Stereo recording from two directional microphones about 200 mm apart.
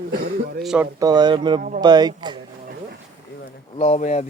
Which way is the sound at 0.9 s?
20° right (ahead or behind).